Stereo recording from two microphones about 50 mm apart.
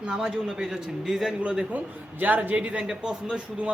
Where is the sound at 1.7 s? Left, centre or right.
Right; by 3.7 s centre.